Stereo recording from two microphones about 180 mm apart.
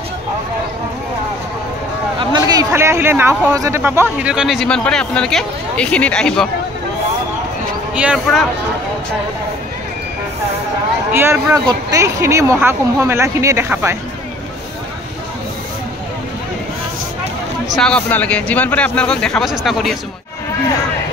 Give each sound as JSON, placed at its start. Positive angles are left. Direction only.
{"t": 2.1, "sound": "speech", "side_deg": -20}
{"t": 7.9, "sound": "speech", "side_deg": -5}
{"t": 11.1, "sound": "speech", "side_deg": -15}
{"t": 17.6, "sound": "speech", "side_deg": 5}